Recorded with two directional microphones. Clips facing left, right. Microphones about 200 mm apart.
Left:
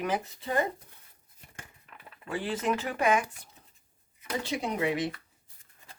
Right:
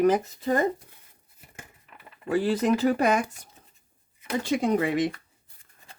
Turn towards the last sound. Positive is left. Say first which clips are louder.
# right 6 dB
turn(degrees=-50)  # may be behind; listen again after turning